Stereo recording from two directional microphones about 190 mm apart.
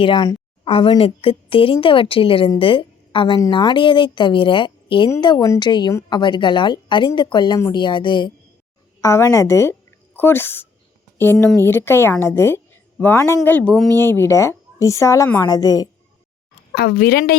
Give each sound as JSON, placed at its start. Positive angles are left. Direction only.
{"t": 0.0, "sound": "a woman's voice", "side_deg": 25}
{"t": 16.7, "sound": "a woman's voice", "side_deg": 55}